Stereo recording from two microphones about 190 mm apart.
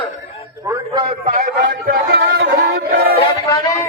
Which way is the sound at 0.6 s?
25° right (ahead or behind).